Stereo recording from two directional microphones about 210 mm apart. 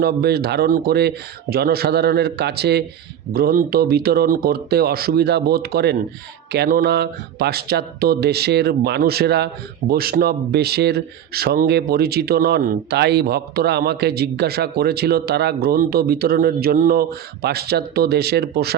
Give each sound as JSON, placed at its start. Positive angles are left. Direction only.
{"t": 0.0, "sound": "speech", "side_deg": -50}